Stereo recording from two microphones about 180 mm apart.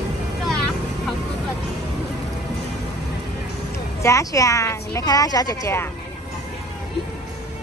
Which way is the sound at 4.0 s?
15° left (ahead or behind).